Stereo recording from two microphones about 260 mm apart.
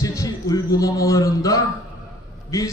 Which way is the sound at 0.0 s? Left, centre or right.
Centre.